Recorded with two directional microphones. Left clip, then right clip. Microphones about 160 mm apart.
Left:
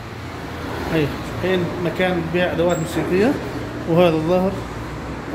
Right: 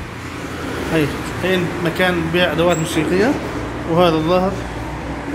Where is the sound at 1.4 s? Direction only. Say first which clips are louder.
Right 2 dB; 15° left (ahead or behind).